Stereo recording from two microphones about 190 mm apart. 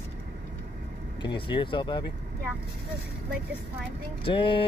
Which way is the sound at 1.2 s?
25° left (ahead or behind).